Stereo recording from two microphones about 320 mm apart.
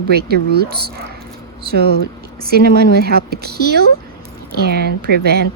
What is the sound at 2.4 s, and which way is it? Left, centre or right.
A woman's voice, right.